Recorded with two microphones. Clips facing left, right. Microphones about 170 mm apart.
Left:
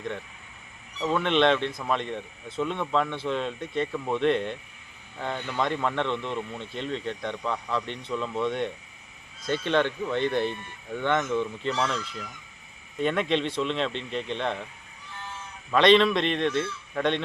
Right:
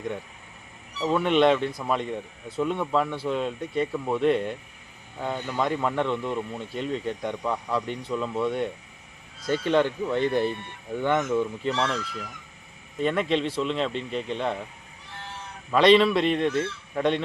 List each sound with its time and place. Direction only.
1.0 s speech: 10° right (ahead or behind)
13.0 s speech: centre (ahead or behind)
15.1 s sheep: 70° right (ahead or behind)
15.7 s speech: 5° right (ahead or behind)